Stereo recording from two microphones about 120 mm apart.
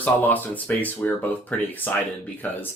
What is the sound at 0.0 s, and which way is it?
Speech, 15° left (ahead or behind).